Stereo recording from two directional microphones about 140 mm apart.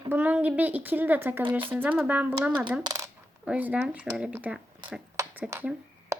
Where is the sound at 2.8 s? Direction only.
25° right (ahead or behind).